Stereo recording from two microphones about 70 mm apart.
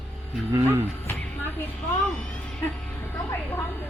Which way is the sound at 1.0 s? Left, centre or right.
Left.